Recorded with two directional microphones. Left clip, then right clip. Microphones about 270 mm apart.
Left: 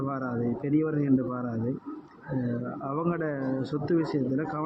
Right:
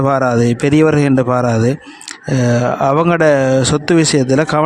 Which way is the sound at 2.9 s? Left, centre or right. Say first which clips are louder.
Right 18 dB; right.